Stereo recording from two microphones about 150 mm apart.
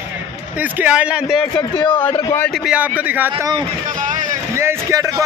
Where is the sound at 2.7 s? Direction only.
10° right (ahead or behind).